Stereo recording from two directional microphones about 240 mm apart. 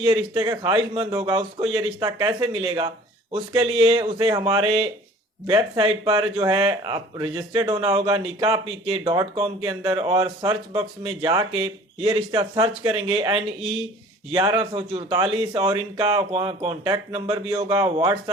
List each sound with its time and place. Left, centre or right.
0.3 s speech: centre
13.6 s speech: centre
14.3 s speech: centre